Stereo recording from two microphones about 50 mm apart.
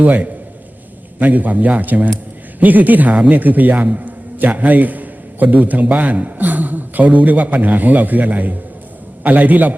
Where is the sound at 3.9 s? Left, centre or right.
Right.